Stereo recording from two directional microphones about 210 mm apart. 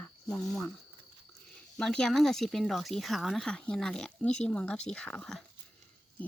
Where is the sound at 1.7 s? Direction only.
5° left (ahead or behind).